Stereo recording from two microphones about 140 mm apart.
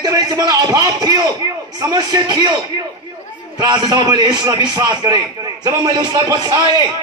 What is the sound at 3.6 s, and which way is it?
A man's voice, 30° right (ahead or behind).